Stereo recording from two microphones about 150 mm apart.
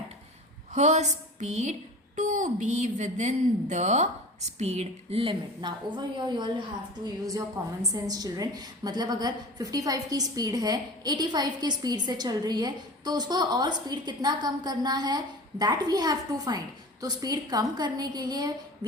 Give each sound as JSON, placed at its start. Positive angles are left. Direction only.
{"t": 0.7, "sound": "a woman's voice", "side_deg": -50}